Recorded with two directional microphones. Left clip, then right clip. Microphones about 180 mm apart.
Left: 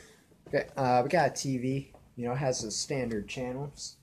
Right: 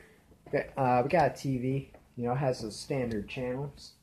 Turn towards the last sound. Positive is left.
turn(degrees=-15)  # may be behind; listen again after turning